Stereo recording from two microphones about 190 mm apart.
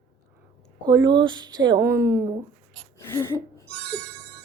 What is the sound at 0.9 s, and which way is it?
A woman's voice, 20° right (ahead or behind).